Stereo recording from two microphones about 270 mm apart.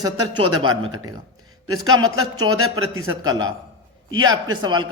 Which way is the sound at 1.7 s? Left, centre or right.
Centre.